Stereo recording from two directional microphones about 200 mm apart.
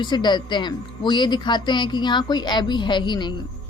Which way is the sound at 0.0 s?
20° left (ahead or behind).